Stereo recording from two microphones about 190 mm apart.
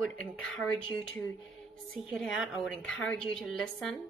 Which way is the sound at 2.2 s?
Centre (ahead or behind).